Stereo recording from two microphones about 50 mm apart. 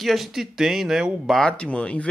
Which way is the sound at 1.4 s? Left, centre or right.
Left.